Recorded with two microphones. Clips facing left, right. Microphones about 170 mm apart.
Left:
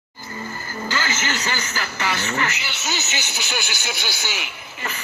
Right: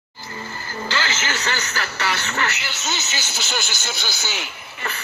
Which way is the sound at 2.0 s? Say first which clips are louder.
Left 1 dB; 15° left (ahead or behind).